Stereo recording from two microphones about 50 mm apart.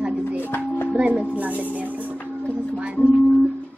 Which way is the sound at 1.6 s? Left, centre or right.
Right.